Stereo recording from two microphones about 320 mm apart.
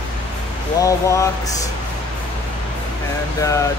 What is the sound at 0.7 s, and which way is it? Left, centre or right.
Speech, centre.